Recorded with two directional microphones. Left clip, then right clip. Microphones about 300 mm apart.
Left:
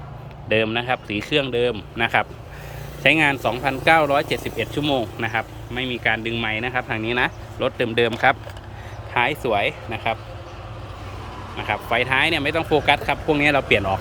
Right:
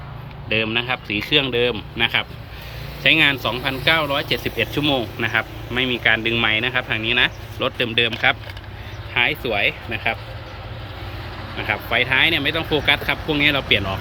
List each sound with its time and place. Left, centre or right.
0.4 s speech: centre
11.5 s speech: centre